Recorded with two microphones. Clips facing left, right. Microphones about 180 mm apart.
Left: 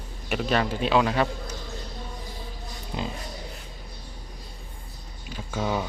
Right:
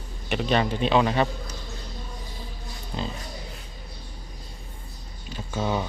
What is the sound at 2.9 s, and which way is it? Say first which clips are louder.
Speech: even; 15° left (ahead or behind).